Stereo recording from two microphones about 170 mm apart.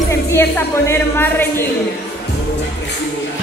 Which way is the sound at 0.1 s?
15° left (ahead or behind).